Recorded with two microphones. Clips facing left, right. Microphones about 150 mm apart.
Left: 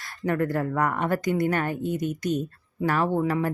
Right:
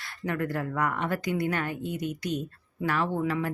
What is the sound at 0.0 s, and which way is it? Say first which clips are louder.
Speech: left 5 dB; 45° left (ahead or behind).